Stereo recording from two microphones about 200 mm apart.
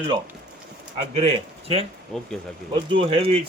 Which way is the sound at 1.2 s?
30° right (ahead or behind).